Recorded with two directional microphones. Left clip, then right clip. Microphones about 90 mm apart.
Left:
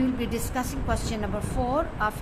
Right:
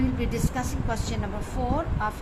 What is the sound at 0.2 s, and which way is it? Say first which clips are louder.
A woman's voice: even; 35° left (ahead or behind).